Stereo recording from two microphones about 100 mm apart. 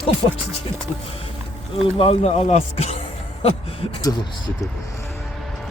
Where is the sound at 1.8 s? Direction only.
75° left (ahead or behind).